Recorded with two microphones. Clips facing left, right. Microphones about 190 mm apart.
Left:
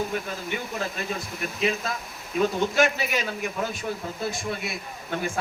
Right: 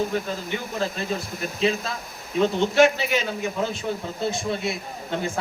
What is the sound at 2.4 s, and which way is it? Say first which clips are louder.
A man's voice: right 4 dB; 25° right (ahead or behind).